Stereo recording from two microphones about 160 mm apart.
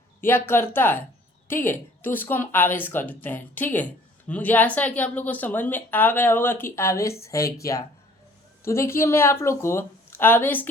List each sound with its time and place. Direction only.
0.3 s a woman's voice: 15° left (ahead or behind)